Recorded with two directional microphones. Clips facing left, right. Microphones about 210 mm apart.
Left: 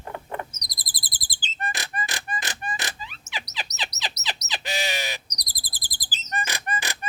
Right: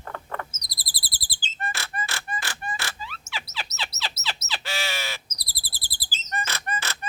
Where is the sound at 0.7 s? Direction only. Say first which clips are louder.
Even; 15° left (ahead or behind).